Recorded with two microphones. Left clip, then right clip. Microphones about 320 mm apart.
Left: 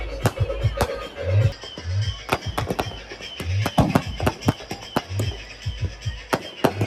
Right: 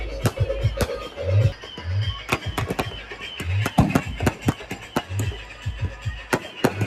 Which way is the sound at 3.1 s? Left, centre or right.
Left.